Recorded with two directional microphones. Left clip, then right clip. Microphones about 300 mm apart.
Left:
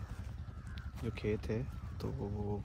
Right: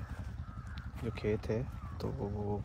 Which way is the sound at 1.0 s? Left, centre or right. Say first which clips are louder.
Right 3 dB; centre.